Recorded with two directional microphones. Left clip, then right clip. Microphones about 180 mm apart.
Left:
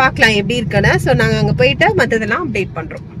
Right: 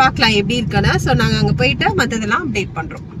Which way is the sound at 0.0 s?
15° left (ahead or behind).